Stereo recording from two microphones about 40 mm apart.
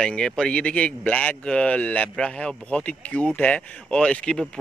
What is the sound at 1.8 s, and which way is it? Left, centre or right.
Speech, left.